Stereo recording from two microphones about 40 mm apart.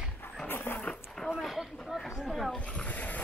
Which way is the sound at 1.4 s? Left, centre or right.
Centre.